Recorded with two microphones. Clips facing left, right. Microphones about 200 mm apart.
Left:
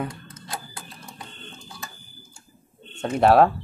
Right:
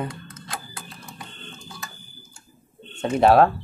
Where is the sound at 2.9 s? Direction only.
Centre (ahead or behind).